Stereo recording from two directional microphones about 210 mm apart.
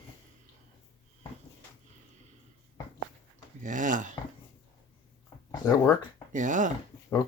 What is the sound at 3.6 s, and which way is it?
Speech, 40° right (ahead or behind).